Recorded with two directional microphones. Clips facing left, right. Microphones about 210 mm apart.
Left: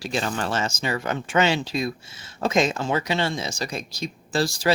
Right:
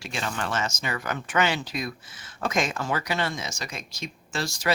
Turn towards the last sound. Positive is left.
turn(degrees=35)  # may be behind; listen again after turning